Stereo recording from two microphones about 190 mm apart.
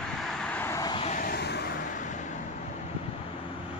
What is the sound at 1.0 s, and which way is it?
Vehicle, 45° left (ahead or behind).